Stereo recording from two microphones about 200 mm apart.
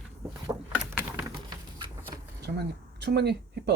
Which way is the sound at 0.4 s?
10° right (ahead or behind).